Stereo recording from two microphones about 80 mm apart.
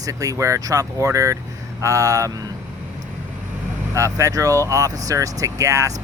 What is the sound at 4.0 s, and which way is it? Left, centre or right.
Speech, right.